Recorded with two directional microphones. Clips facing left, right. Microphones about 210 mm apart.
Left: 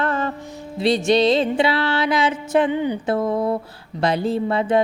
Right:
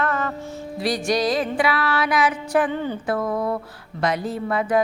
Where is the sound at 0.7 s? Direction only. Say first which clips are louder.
Left 5 dB; 25° left (ahead or behind).